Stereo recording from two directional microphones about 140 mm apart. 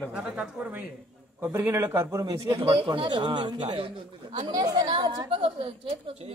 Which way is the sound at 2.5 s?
40° right (ahead or behind).